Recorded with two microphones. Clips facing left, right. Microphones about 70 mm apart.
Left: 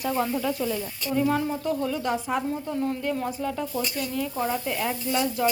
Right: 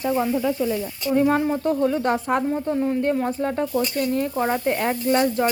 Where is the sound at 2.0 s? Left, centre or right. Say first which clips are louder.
Right 5 dB; right.